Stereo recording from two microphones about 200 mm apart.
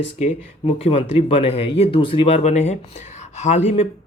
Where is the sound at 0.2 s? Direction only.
30° left (ahead or behind).